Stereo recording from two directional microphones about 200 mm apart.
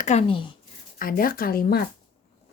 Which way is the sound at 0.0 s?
35° left (ahead or behind).